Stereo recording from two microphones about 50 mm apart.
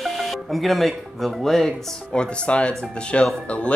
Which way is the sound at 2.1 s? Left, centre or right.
Left.